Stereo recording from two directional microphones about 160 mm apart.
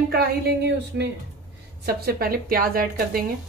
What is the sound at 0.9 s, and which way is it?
Speech, 90° right.